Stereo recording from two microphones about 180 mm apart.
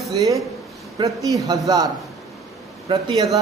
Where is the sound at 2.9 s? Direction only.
30° right (ahead or behind).